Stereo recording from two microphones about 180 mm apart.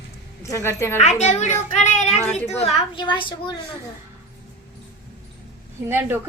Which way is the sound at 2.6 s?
25° left (ahead or behind).